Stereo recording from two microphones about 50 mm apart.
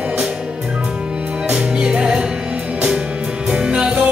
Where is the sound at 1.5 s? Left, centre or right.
Right.